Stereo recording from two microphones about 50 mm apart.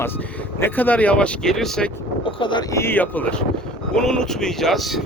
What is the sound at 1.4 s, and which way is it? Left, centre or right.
Speech, centre.